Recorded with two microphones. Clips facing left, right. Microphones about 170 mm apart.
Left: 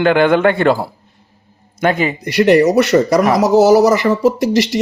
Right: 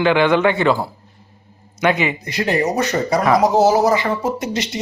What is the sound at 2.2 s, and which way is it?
Speech, 75° left (ahead or behind).